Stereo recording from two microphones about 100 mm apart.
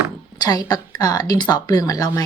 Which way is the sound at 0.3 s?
40° left (ahead or behind).